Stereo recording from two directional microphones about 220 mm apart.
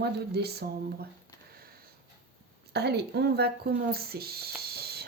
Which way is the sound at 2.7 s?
50° right (ahead or behind).